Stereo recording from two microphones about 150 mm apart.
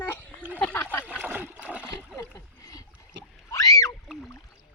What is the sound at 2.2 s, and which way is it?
Rowboat, 20° left (ahead or behind).